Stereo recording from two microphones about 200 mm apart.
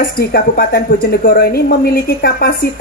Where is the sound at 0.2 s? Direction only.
50° left (ahead or behind).